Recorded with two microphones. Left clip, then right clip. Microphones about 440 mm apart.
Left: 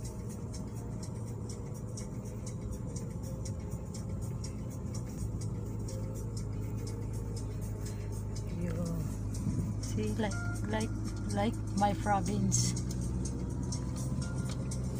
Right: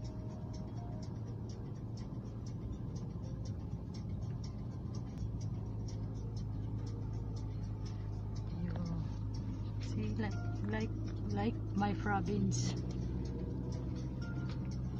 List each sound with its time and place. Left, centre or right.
10.1 s speech: right